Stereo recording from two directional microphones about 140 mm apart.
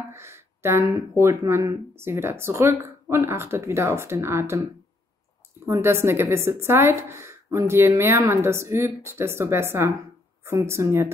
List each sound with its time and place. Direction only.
0.1 s a sound: 20° right (ahead or behind)
0.9 s speech: 20° right (ahead or behind)
5.7 s a woman's voice: 20° right (ahead or behind)